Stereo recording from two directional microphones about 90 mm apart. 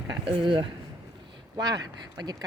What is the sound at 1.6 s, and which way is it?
Speech, 45° right (ahead or behind).